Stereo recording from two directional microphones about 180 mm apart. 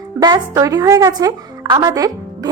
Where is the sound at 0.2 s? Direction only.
20° right (ahead or behind).